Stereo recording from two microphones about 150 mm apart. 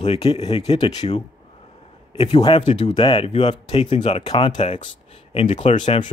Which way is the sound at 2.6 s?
50° left (ahead or behind).